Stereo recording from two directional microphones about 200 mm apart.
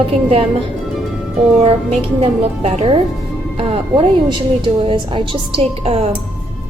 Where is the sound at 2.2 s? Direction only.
30° right (ahead or behind).